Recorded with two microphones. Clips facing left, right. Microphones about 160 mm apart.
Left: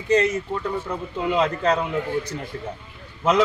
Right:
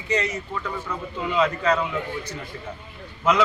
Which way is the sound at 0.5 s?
30° left (ahead or behind).